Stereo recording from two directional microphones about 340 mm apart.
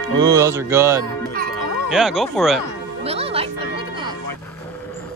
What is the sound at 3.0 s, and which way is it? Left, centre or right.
Music, centre.